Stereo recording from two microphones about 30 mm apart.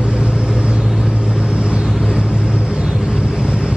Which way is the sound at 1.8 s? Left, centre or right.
Centre.